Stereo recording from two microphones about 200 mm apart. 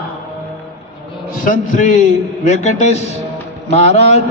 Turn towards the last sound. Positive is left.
turn(degrees=30)  # may be behind; listen again after turning